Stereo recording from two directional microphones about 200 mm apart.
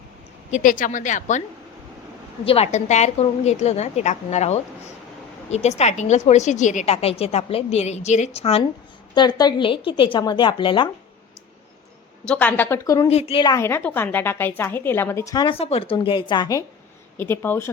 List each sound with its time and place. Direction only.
0.5 s a woman's voice: 40° left (ahead or behind); by 10.8 s 25° left (ahead or behind)
12.3 s a woman's voice: 5° left (ahead or behind)
13.1 s a woman's voice: 30° left (ahead or behind); by 17.7 s 10° left (ahead or behind)